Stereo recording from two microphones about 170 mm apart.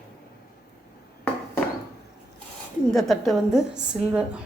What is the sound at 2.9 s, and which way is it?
A woman's voice, centre (ahead or behind).